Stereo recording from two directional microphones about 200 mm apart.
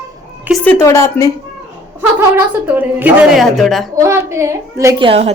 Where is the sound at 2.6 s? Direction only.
10° right (ahead or behind).